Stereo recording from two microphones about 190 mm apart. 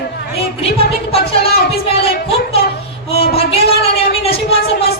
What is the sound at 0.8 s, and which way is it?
A woman's voice, 30° left (ahead or behind).